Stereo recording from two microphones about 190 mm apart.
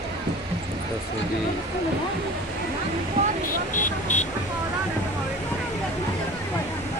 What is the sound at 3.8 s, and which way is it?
Vehicle, 40° left (ahead or behind).